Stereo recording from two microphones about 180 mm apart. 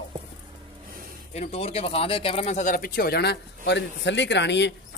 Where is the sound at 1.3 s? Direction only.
35° left (ahead or behind).